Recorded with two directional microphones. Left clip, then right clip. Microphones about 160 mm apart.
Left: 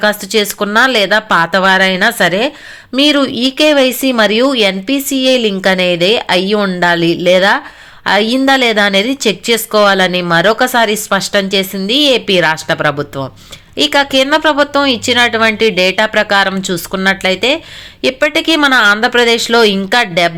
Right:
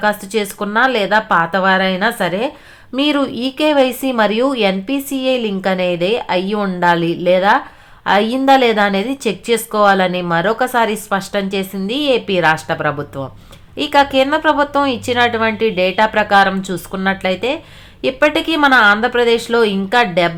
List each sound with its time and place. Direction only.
0.0 s a woman's voice: 20° left (ahead or behind)